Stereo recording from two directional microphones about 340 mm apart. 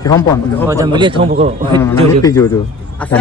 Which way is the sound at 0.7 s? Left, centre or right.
Centre.